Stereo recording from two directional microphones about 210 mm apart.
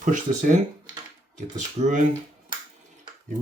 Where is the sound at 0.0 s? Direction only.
40° right (ahead or behind).